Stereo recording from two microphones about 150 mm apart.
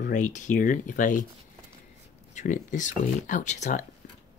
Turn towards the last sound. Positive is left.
turn(degrees=50)  # may be behind; listen again after turning